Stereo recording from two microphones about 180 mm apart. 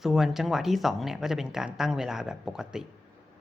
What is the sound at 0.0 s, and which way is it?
Speech, centre (ahead or behind).